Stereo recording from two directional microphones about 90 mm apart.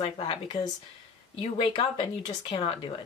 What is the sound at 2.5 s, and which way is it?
Speech, 85° left.